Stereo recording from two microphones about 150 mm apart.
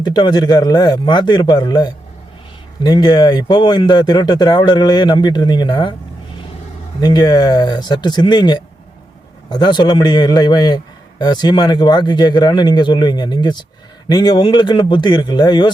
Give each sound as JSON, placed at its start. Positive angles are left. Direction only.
{"t": 0.0, "sound": "speech", "side_deg": 30}
{"t": 7.0, "sound": "speech", "side_deg": 25}